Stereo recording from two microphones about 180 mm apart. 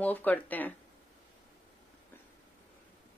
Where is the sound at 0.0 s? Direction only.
10° left (ahead or behind).